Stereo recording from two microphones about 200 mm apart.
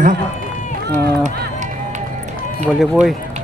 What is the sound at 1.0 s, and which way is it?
Speech, 50° right (ahead or behind).